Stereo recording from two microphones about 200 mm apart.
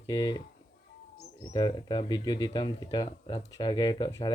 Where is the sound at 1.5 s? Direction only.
25° left (ahead or behind).